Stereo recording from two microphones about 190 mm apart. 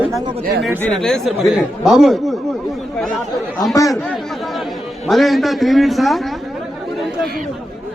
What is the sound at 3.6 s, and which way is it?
Speech, 20° left (ahead or behind).